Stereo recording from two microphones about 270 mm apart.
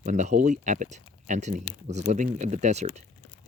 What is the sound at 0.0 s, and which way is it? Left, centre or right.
Speech, right.